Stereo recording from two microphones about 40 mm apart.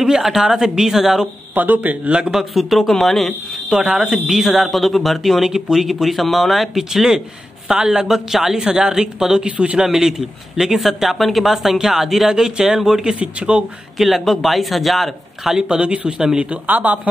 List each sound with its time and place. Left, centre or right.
0.0 s speech: centre
1.5 s speech: right
2.3 s speech: centre
3.7 s speech: right
4.3 s speech: centre
13.1 s speech: right
13.9 s speech: centre
15.7 s speech: right
16.6 s speech: right